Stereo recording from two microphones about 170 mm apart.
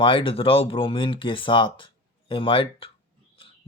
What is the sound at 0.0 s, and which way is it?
Speech, 30° left (ahead or behind).